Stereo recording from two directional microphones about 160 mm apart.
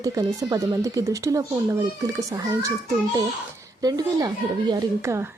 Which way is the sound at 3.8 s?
25° right (ahead or behind).